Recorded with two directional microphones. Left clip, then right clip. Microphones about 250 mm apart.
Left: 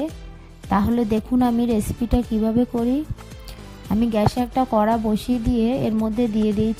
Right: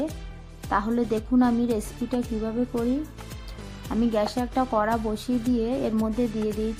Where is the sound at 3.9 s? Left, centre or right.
Left.